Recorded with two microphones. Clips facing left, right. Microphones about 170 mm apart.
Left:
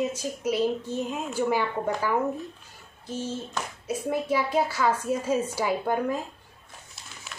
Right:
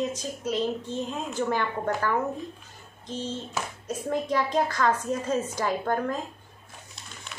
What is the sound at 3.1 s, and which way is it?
Speech, 10° left (ahead or behind).